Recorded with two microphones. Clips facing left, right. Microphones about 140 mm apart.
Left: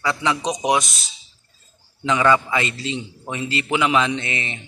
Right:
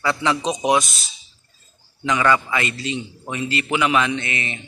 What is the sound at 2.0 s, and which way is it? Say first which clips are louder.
A man's voice: left 1 dB; 20° left (ahead or behind).